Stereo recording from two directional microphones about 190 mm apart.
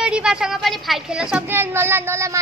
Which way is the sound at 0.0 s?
5° right (ahead or behind).